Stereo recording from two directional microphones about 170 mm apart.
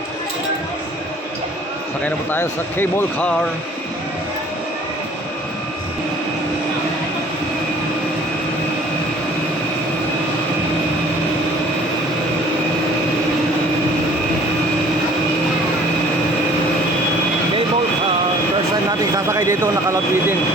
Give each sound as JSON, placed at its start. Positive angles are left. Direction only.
{"t": 2.0, "sound": "speech", "side_deg": 10}
{"t": 18.9, "sound": "vehicle", "side_deg": -20}